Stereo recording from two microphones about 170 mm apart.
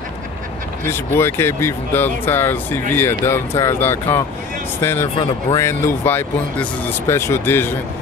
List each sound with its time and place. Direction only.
0.8 s speech: 15° left (ahead or behind)
5.1 s speech: 30° left (ahead or behind)
6.0 s speech: 10° left (ahead or behind)